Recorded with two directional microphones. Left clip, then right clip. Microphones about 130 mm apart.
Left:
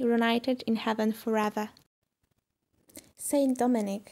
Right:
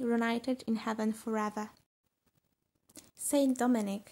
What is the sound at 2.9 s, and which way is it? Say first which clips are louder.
Speech: left 3 dB; 20° left (ahead or behind).